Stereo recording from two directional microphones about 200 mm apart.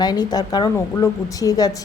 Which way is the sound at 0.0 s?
20° left (ahead or behind).